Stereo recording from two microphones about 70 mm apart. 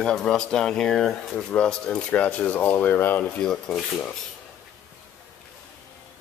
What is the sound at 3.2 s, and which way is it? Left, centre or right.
Speech, centre.